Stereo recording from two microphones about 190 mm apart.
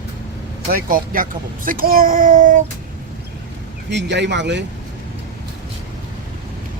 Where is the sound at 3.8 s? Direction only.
65° right (ahead or behind).